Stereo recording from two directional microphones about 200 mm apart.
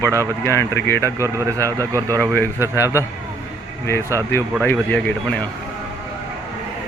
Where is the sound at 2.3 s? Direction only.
15° left (ahead or behind).